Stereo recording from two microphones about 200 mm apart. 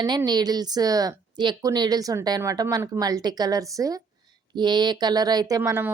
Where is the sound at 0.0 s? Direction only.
20° right (ahead or behind).